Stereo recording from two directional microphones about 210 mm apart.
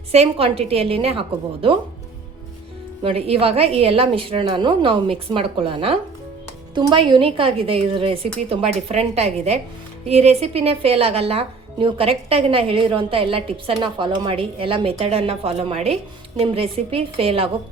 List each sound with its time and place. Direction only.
0.1 s a woman's voice: 30° right (ahead or behind)
3.0 s a woman's voice: 30° right (ahead or behind)